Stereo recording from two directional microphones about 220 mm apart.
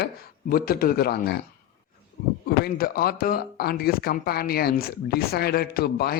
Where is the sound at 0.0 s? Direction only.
45° left (ahead or behind).